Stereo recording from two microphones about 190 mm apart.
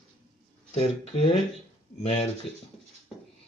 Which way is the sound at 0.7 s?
35° left (ahead or behind).